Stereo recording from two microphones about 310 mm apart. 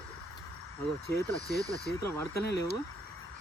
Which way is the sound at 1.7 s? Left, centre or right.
Left.